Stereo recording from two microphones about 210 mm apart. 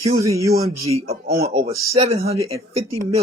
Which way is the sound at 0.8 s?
30° right (ahead or behind).